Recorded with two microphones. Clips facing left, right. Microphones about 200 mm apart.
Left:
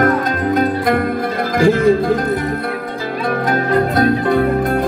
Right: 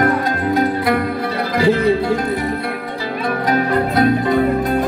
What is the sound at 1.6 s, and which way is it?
Speech, 45° left (ahead or behind).